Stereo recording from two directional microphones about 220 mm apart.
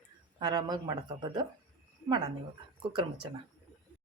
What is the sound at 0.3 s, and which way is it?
Speech, 20° right (ahead or behind).